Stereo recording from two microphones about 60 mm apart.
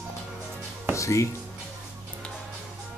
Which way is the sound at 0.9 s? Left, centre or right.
Left.